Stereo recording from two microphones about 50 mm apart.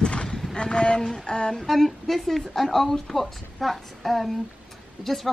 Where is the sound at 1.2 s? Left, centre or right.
Centre.